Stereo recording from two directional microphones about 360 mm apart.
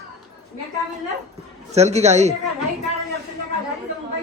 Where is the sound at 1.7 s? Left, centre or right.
Centre.